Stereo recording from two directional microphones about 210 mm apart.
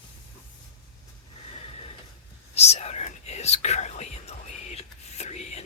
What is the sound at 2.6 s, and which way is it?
Whispering, 30° left (ahead or behind).